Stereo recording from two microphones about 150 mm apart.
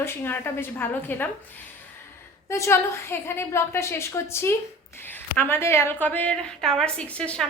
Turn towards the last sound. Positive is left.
turn(degrees=10)  # may be behind; listen again after turning